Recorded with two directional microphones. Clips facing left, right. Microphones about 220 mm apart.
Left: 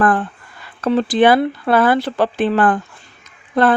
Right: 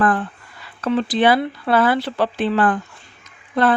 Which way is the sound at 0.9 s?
45° left (ahead or behind).